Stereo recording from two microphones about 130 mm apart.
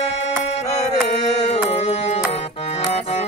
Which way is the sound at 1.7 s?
60° left (ahead or behind).